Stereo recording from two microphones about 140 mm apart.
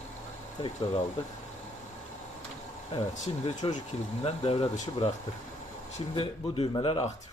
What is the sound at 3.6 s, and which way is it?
Speech, 40° left (ahead or behind).